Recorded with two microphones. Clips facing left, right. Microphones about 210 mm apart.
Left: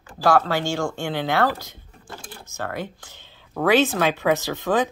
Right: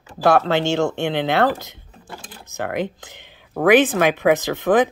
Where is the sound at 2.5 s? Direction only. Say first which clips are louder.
Right 6 dB; 20° right (ahead or behind).